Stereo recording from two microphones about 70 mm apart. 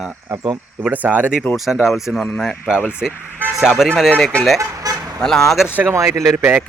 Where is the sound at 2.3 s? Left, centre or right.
Centre.